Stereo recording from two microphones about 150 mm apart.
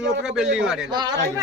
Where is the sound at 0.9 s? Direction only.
30° right (ahead or behind).